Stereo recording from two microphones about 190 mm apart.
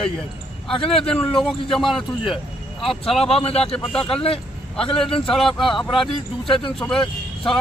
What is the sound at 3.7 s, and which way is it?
Speech, 5° left (ahead or behind).